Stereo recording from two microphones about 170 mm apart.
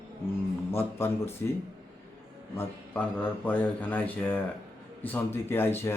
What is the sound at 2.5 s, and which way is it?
Speech, 10° left (ahead or behind).